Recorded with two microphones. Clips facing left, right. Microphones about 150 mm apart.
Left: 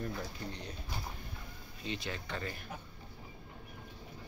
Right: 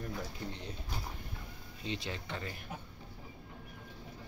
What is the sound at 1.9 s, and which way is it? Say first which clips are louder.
Speech: even; 25° right (ahead or behind).